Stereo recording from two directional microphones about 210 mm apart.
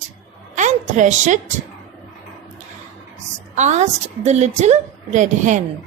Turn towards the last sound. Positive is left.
turn(degrees=-35)  # may be behind; listen again after turning